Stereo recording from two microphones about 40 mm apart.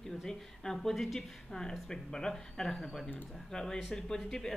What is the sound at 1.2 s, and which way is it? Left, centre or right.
A woman's voice, centre.